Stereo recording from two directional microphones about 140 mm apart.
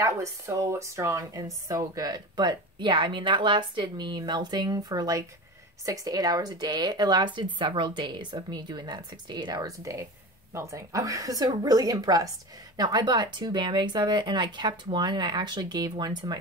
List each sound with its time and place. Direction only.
0.0 s a woman's voice: 20° right (ahead or behind)